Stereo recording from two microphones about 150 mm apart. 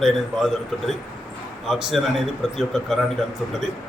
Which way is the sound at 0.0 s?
Centre (ahead or behind).